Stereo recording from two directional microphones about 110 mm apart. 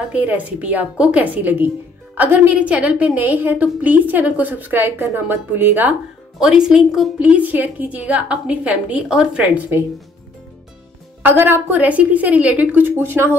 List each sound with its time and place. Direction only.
0.1 s a woman's voice: 15° right (ahead or behind)
6.4 s a woman's voice: 5° right (ahead or behind)
11.2 s a woman's voice: 20° right (ahead or behind)